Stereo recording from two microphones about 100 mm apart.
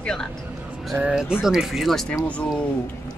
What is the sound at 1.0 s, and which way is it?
A woman's voice, 10° right (ahead or behind).